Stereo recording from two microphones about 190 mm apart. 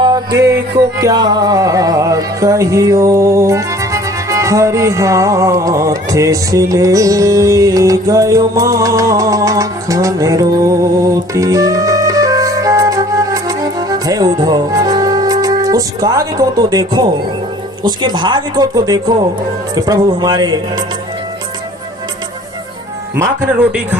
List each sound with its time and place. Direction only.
0.9 s music: 20° right (ahead or behind)
17.8 s speech: 25° right (ahead or behind)